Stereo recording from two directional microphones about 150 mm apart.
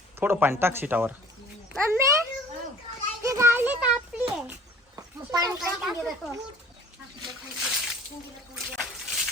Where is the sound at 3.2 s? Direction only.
20° right (ahead or behind).